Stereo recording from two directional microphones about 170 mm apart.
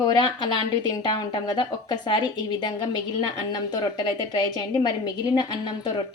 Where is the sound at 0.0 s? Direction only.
25° left (ahead or behind).